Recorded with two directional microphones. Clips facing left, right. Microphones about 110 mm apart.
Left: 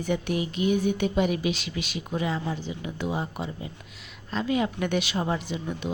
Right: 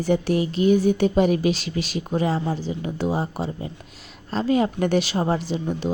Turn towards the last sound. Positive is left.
turn(degrees=-35)  # may be behind; listen again after turning